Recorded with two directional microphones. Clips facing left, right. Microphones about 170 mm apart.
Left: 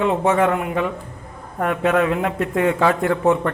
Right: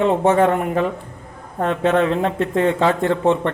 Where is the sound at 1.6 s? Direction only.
25° right (ahead or behind).